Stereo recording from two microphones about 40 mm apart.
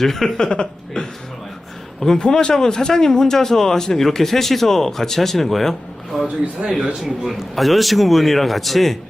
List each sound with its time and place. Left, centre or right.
0.0 s a man's voice: centre
0.3 s speech: left
2.1 s a man's voice: left; by 6.3 s centre
6.6 s speech: right
7.0 s a man's voice: centre